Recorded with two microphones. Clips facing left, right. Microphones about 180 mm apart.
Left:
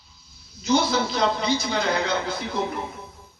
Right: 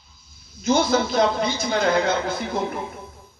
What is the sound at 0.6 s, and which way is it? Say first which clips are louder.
A woman's voice: right 2 dB; 50° right (ahead or behind).